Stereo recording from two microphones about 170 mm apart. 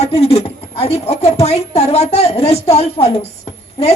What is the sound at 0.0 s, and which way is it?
Speech, 35° left (ahead or behind).